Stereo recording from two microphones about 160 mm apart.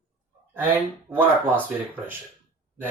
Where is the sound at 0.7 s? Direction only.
10° right (ahead or behind).